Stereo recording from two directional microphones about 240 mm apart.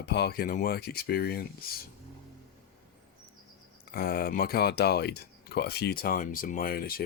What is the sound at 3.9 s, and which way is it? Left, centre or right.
Speech, left.